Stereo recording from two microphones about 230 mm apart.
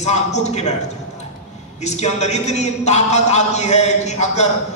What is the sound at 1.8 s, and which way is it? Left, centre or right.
A man's voice, left.